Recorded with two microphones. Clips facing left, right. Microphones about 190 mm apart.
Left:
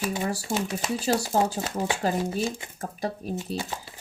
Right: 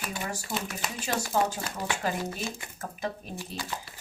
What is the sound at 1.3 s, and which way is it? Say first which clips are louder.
Speech: left 3 dB; 25° left (ahead or behind).